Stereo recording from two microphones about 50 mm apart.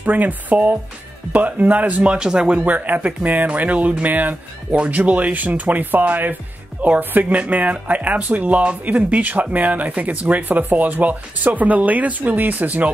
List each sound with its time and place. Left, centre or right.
0.0 s speech: right
2.1 s speech: centre; by 12.9 s right